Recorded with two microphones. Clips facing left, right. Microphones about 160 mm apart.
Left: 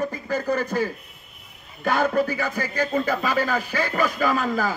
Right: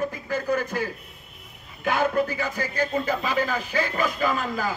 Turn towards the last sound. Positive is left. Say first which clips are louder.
# left 3 dB
turn(degrees=45)  # may be behind; listen again after turning